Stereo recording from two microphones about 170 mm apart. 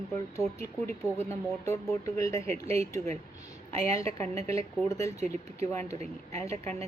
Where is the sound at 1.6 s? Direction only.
15° left (ahead or behind).